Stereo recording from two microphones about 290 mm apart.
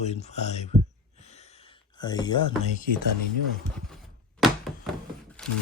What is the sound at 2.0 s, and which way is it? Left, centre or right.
Speech, centre.